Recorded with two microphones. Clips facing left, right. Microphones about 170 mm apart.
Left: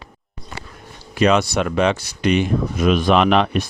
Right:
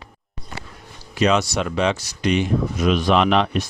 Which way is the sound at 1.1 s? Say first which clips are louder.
Left 3 dB; 55° left (ahead or behind).